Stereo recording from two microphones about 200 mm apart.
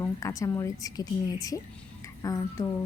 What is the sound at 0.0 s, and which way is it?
A woman's voice, 15° left (ahead or behind).